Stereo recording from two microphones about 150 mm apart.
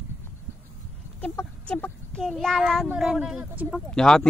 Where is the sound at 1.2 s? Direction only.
10° left (ahead or behind); by 3.8 s 10° right (ahead or behind).